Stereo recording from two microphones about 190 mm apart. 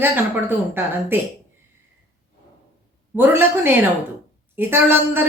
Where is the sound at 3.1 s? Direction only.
10° right (ahead or behind).